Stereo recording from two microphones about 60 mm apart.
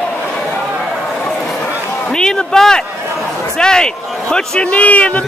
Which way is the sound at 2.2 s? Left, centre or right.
Centre.